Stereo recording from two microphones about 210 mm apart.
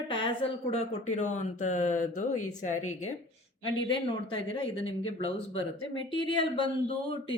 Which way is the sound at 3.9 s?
25° left (ahead or behind).